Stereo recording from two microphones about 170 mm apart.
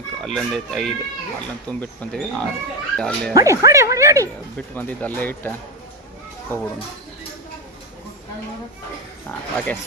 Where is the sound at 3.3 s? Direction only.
20° right (ahead or behind).